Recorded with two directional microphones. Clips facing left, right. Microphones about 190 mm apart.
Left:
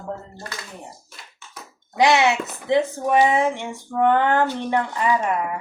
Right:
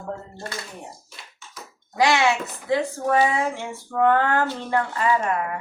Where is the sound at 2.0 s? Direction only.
20° left (ahead or behind).